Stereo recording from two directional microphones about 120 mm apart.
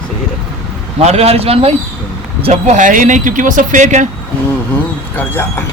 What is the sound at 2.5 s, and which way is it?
Speech, 85° right.